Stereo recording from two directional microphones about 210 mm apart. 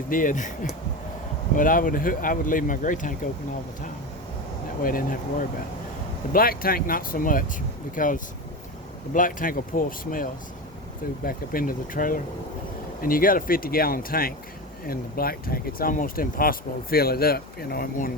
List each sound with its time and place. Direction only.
0.1 s speech: 40° left (ahead or behind)
4.8 s speech: 40° left (ahead or behind)